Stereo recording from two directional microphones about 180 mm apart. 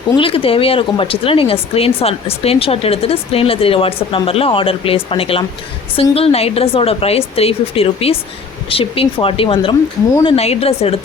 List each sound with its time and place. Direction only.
0.2 s speech: 30° left (ahead or behind)